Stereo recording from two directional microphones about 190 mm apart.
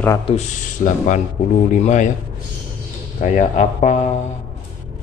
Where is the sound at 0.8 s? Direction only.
40° left (ahead or behind).